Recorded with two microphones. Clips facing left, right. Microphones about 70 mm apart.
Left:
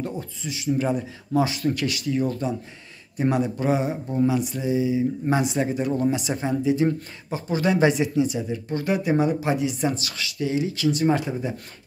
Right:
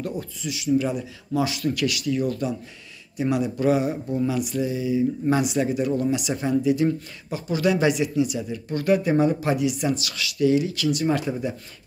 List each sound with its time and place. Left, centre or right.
0.4 s speech: left